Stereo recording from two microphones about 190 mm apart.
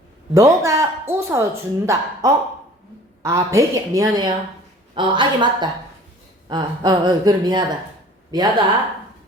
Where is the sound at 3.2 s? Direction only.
15° right (ahead or behind).